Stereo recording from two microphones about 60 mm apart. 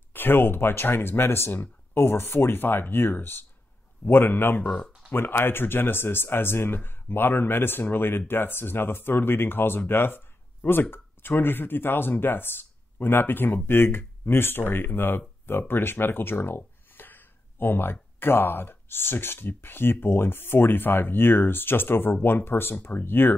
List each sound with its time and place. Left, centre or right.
0.1 s speech: left